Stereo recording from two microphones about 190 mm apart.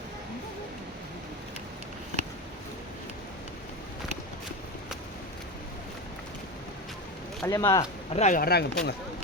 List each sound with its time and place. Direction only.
7.4 s speech: 20° left (ahead or behind)
8.1 s speech: 35° left (ahead or behind)
8.4 s speech: 55° left (ahead or behind)